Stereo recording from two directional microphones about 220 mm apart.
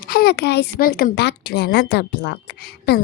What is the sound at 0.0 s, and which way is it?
A woman's voice, 45° left (ahead or behind).